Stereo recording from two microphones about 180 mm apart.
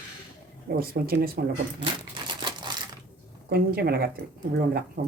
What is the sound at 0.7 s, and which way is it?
Speech, 60° right (ahead or behind).